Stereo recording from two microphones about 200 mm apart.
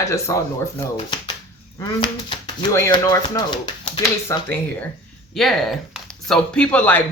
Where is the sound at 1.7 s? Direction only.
20° left (ahead or behind).